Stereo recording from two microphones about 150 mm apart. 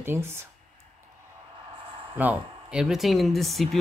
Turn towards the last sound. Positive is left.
turn(degrees=0)  # may be behind; listen again after turning